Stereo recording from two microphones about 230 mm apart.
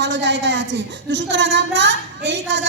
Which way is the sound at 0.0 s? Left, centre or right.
Right.